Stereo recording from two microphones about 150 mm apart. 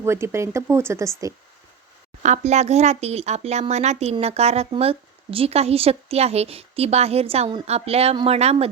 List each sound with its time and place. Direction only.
0.0 s speech: 15° right (ahead or behind)
2.2 s speech: 50° right (ahead or behind)